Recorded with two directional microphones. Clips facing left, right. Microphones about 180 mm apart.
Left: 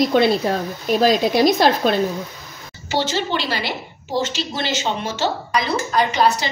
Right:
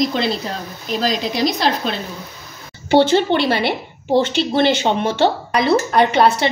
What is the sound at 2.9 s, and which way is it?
A woman's voice, 55° right (ahead or behind).